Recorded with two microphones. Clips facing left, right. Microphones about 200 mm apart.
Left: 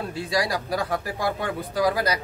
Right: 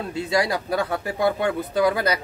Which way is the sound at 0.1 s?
25° right (ahead or behind).